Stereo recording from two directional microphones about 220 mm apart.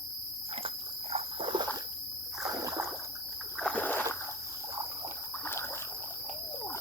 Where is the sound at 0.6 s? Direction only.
25° right (ahead or behind).